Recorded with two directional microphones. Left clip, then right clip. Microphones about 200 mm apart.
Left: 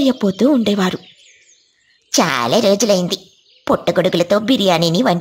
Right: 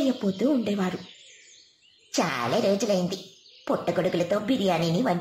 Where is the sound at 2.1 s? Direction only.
40° left (ahead or behind).